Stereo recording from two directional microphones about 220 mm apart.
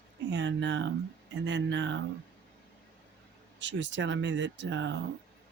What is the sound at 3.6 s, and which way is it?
Speech, 55° right (ahead or behind).